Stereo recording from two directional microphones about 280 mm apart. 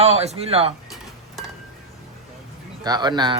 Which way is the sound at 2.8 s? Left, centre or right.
Centre.